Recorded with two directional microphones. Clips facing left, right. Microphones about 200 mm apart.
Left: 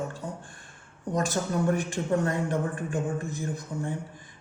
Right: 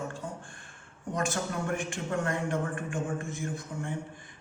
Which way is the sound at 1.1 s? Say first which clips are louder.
Left 4 dB; 40° left (ahead or behind).